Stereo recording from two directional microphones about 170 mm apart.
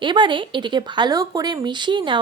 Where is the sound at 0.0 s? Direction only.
30° right (ahead or behind).